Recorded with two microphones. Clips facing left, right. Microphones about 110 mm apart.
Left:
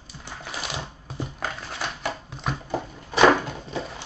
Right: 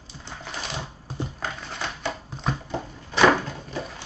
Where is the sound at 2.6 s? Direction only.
15° left (ahead or behind).